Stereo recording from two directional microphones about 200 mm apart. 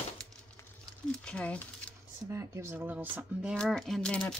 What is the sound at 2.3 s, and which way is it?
Speech, 15° right (ahead or behind).